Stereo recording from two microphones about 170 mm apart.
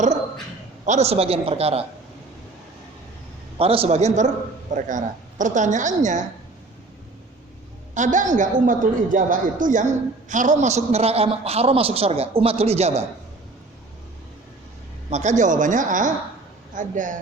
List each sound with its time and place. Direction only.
0.9 s a woman's voice: 40° right (ahead or behind)
3.6 s a woman's voice: 35° right (ahead or behind)
7.9 s a woman's voice: 45° right (ahead or behind)
15.1 s a woman's voice: 45° right (ahead or behind)